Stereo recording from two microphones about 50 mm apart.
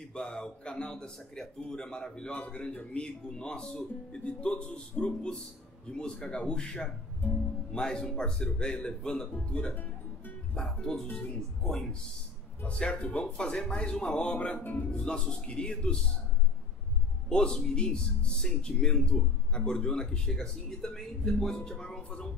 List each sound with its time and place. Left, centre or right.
0.1 s a man's voice: centre
10.8 s a man's voice: centre
11.1 s speech: left
11.6 s a man's voice: centre
12.6 s speech: left
14.6 s speech: left
15.0 s a man's voice: centre
17.3 s a man's voice: centre
21.6 s music: centre